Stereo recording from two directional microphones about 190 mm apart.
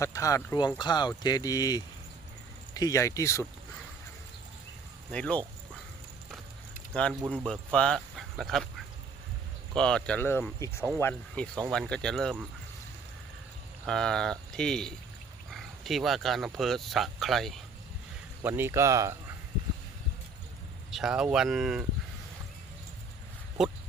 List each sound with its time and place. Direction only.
0.0 s speech: 15° left (ahead or behind)
5.1 s speech: 5° left (ahead or behind)
6.9 s speech: 5° left (ahead or behind)
13.8 s speech: 5° left (ahead or behind)
18.4 s speech: 10° right (ahead or behind)
20.9 s speech: 5° right (ahead or behind)
23.6 s speech: centre (ahead or behind)